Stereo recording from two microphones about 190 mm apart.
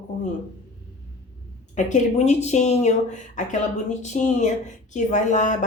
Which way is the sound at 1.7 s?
40° left (ahead or behind).